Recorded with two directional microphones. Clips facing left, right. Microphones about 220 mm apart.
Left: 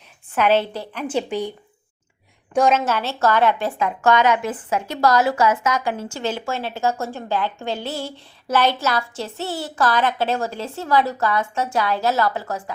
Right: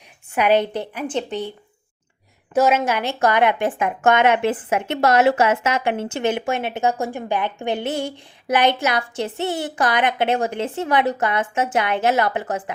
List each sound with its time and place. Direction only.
0.3 s a woman's voice: 15° right (ahead or behind)
1.0 s a woman's voice: 10° left (ahead or behind)
2.5 s a woman's voice: 5° right (ahead or behind); by 12.7 s 20° right (ahead or behind)